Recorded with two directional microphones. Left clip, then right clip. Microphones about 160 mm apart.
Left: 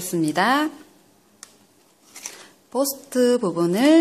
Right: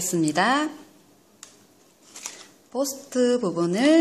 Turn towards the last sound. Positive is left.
turn(degrees=15)  # may be behind; listen again after turning